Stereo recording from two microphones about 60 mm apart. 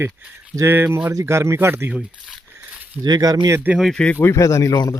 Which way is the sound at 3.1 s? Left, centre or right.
Right.